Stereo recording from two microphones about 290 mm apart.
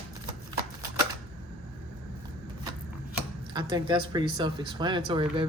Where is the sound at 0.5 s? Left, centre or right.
Centre.